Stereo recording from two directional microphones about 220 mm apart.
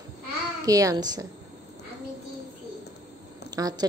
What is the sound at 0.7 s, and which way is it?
Speech, 15° right (ahead or behind).